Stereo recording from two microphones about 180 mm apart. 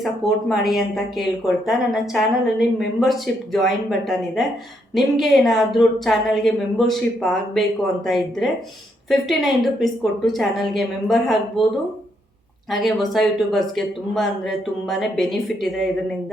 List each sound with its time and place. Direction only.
0.0 s speech: centre (ahead or behind)
4.9 s speech: centre (ahead or behind)
12.7 s speech: centre (ahead or behind)